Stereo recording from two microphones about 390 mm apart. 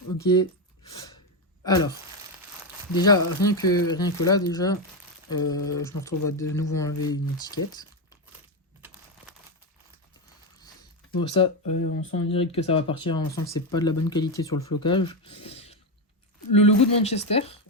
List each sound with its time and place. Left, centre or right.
1.6 s speech: centre
2.9 s speech: centre
11.1 s speech: centre